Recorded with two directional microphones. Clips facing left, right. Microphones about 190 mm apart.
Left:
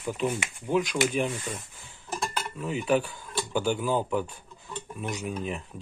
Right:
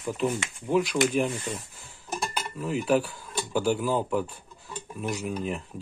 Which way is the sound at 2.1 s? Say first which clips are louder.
Even; 15° right (ahead or behind).